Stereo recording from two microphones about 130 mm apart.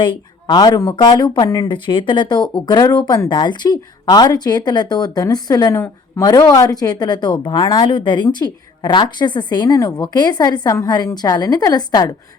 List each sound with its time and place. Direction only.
0.0 s speech: 35° left (ahead or behind)